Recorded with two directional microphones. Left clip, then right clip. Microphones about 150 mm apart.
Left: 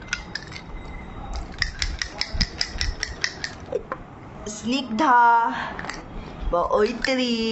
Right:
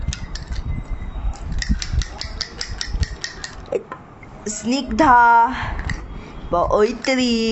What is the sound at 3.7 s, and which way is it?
Squish, 75° right (ahead or behind).